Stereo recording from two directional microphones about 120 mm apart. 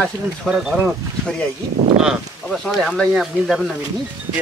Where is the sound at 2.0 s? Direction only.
Centre (ahead or behind).